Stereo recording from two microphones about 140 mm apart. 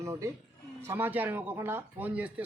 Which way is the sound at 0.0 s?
20° right (ahead or behind).